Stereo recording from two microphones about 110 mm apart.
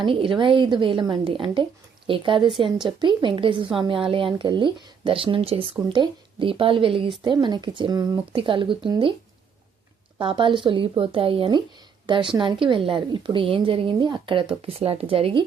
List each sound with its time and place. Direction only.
0.0 s a woman's voice: 50° right (ahead or behind)
8.4 s a woman's voice: 50° right (ahead or behind)
10.2 s a woman's voice: 50° right (ahead or behind)